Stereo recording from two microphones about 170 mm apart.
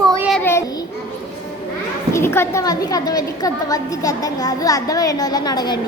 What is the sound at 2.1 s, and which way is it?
A woman's voice, 15° left (ahead or behind).